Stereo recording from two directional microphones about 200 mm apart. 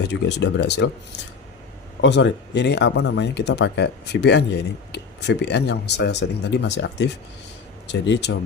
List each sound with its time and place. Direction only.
0.1 s speech: 60° left (ahead or behind)
2.0 s speech: 65° left (ahead or behind)